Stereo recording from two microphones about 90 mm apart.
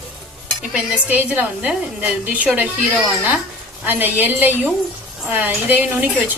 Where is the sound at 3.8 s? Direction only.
20° right (ahead or behind).